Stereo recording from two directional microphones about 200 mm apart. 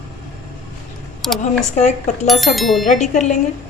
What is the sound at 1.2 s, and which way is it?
Speech, centre (ahead or behind).